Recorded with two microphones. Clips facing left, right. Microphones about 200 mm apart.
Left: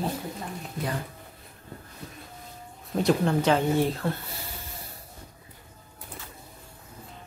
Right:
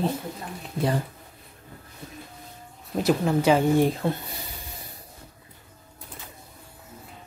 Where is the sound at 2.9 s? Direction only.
5° right (ahead or behind).